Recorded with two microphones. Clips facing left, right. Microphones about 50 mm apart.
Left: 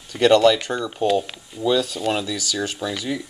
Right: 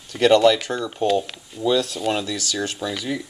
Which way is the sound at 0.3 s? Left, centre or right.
Centre.